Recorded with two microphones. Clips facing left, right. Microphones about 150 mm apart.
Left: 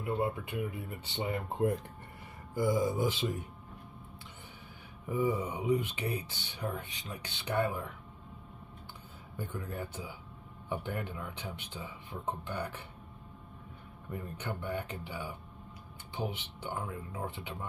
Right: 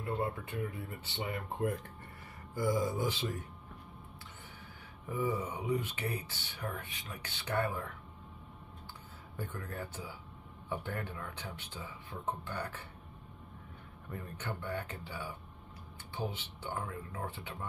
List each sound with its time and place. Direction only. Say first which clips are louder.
0.0 s speech: left 3 dB; 15° left (ahead or behind)
5.0 s speech: left 3 dB; 20° left (ahead or behind)
9.4 s speech: left 2 dB; 15° left (ahead or behind)
14.1 s speech: left 2 dB; 15° left (ahead or behind)